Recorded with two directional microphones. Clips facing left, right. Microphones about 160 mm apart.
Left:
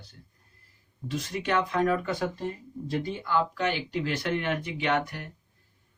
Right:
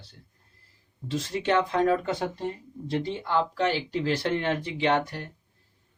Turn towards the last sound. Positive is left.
turn(degrees=-30)  # may be behind; listen again after turning